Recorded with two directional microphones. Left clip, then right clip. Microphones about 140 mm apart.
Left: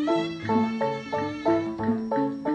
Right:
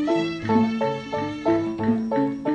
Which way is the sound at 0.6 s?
5° right (ahead or behind).